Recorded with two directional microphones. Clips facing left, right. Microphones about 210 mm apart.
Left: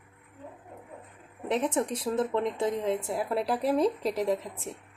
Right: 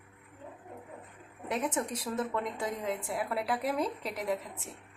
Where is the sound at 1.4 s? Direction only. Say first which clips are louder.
Left 5 dB; 25° left (ahead or behind).